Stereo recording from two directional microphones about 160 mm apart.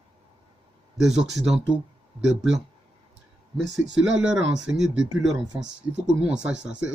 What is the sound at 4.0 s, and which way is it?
Speech, 5° right (ahead or behind).